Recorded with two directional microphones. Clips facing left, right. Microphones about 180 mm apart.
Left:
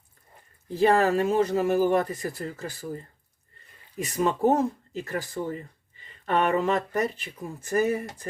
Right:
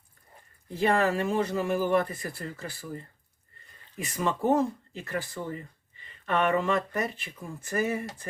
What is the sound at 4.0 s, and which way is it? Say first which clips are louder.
Speech: left 5 dB; 40° left (ahead or behind).